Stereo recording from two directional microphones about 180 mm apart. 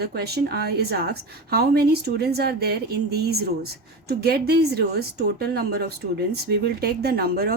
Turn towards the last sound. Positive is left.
turn(degrees=-60)  # may be behind; listen again after turning